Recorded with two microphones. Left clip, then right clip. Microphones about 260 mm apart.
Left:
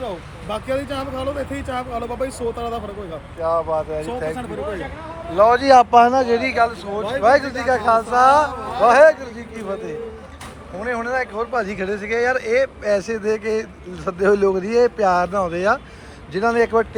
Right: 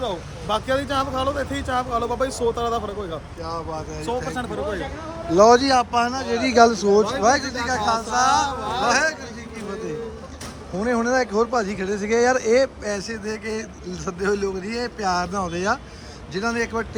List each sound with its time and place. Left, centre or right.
0.0 s speech: centre
7.2 s speech: centre
10.8 s speech: centre